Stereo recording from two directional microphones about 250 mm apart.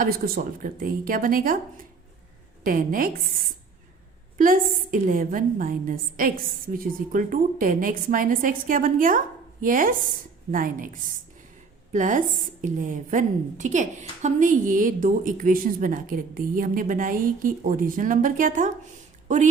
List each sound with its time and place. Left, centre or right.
0.0 s a woman's voice: right
2.6 s a woman's voice: right
4.4 s a woman's voice: right